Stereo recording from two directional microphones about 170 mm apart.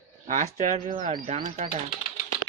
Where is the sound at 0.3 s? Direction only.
45° right (ahead or behind).